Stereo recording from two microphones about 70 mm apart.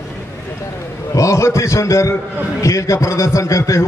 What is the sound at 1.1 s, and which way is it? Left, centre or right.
A man's voice, left.